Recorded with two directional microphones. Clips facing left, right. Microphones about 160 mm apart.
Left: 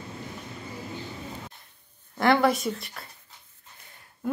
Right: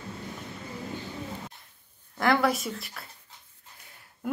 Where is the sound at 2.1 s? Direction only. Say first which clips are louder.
Left 3 dB; centre (ahead or behind).